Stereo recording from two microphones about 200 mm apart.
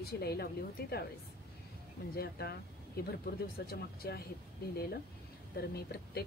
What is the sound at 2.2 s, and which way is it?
Speech, 50° left (ahead or behind).